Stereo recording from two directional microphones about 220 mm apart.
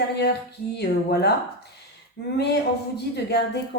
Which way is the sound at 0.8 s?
50° left (ahead or behind).